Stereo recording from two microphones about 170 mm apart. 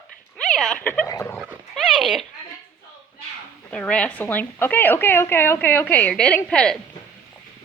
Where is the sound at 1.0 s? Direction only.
15° left (ahead or behind).